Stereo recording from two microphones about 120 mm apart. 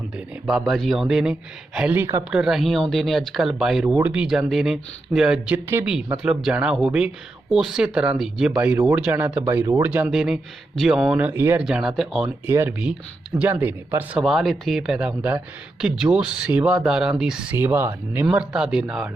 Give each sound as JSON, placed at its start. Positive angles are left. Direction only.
{"t": 0.4, "sound": "speech", "side_deg": -5}
{"t": 2.3, "sound": "speech", "side_deg": -5}
{"t": 3.8, "sound": "speech", "side_deg": -15}
{"t": 11.6, "sound": "speech", "side_deg": -5}
{"t": 12.5, "sound": "speech", "side_deg": -20}
{"t": 14.2, "sound": "speech", "side_deg": 0}
{"t": 17.6, "sound": "speech", "side_deg": -20}